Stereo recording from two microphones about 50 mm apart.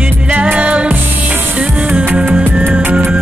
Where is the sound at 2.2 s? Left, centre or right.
Right.